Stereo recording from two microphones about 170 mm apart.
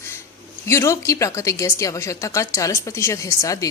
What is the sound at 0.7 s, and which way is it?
A woman's voice, 15° left (ahead or behind).